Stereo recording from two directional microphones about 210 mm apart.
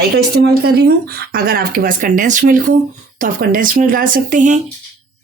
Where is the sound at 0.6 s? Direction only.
50° right (ahead or behind).